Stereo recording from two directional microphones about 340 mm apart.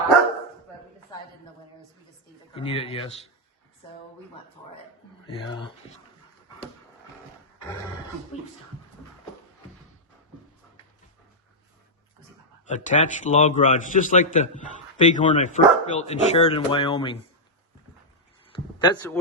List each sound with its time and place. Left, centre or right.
2.6 s speech: centre
5.2 s speech: centre
12.6 s speech: left
18.5 s a sound: centre